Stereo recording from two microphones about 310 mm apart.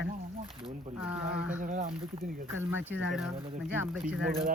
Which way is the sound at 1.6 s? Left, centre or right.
Right.